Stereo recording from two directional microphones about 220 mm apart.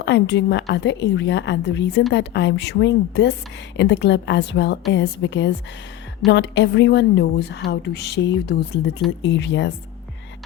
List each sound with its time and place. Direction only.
0.0 s a woman's voice: 55° left (ahead or behind)